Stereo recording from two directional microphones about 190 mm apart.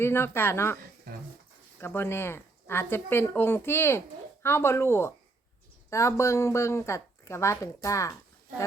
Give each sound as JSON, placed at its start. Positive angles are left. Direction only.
{"t": 0.0, "sound": "speech", "side_deg": 10}
{"t": 1.8, "sound": "speech", "side_deg": 10}